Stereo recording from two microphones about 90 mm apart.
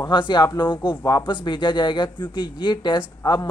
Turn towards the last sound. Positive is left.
turn(degrees=50)  # may be behind; listen again after turning